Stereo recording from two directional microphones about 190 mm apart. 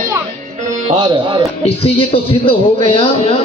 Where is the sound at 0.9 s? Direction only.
25° right (ahead or behind).